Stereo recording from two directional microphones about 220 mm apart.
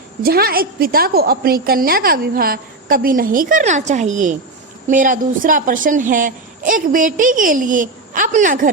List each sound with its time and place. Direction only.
0.2 s a woman's voice: 45° right (ahead or behind)